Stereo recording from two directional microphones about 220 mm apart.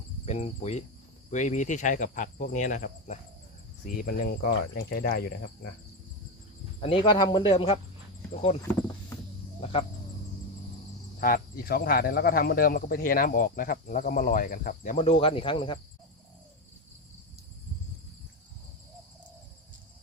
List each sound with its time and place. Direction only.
0.3 s speech: 30° left (ahead or behind)
6.7 s speech: 25° left (ahead or behind)
11.2 s speech: 40° left (ahead or behind); by 15.8 s 20° left (ahead or behind)